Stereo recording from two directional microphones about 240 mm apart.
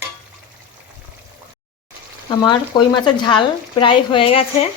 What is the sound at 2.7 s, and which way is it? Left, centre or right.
A woman's voice, centre.